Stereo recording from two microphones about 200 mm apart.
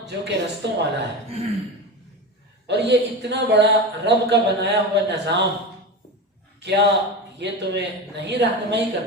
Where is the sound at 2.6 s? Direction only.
60° right (ahead or behind).